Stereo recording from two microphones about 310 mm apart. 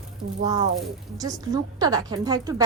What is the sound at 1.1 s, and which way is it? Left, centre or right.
A woman's voice, centre.